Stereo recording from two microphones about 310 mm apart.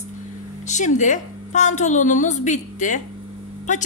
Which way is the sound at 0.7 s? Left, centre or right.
Left.